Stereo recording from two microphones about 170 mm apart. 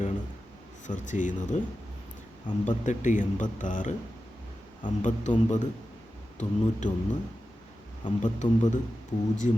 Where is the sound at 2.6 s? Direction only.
45° left (ahead or behind).